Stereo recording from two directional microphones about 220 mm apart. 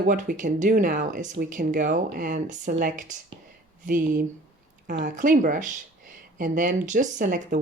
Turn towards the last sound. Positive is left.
turn(degrees=-35)  # may be behind; listen again after turning